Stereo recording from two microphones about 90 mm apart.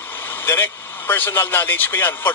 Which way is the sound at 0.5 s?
25° left (ahead or behind).